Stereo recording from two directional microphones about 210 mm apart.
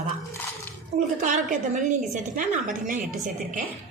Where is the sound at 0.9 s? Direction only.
35° right (ahead or behind).